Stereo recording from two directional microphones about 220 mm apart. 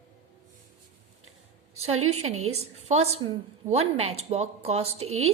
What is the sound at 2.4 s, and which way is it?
Speech, 85° right.